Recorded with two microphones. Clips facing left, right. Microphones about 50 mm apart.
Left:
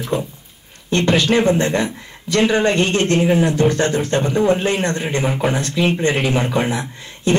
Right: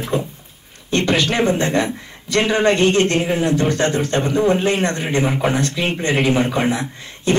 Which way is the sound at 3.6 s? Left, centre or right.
Left.